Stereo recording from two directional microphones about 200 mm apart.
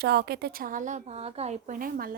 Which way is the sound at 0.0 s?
55° right (ahead or behind).